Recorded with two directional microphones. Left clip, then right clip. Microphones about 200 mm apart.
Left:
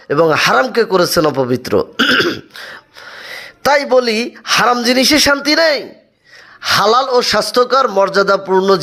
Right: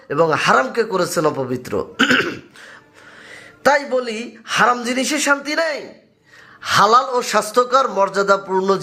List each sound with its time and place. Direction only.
0.1 s speech: 30° left (ahead or behind)
2.6 s speech: 40° left (ahead or behind); by 8.8 s 25° left (ahead or behind)